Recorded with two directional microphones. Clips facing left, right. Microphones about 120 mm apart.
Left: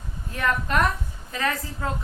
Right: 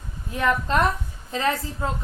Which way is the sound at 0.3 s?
20° right (ahead or behind).